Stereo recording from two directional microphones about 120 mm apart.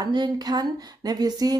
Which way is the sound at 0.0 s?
35° right (ahead or behind).